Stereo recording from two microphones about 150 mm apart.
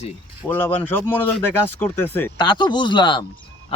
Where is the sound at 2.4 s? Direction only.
30° left (ahead or behind).